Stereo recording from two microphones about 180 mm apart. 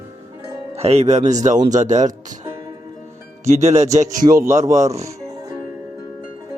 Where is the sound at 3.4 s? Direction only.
40° right (ahead or behind).